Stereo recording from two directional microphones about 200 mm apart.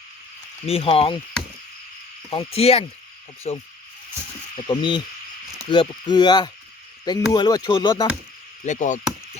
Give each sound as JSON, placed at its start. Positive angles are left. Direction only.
{"t": 0.6, "sound": "speech", "side_deg": 30}
{"t": 2.3, "sound": "cricket", "side_deg": 30}
{"t": 4.7, "sound": "speech", "side_deg": 20}
{"t": 8.6, "sound": "cricket", "side_deg": 35}